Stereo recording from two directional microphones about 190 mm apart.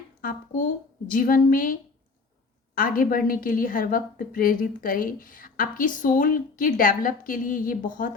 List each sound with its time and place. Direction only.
0.2 s a woman's voice: 45° left (ahead or behind)